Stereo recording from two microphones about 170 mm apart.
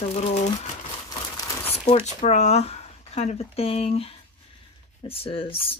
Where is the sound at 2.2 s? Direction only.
40° left (ahead or behind).